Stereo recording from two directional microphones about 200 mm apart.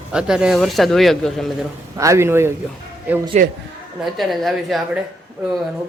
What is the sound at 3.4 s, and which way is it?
Speech, 35° right (ahead or behind).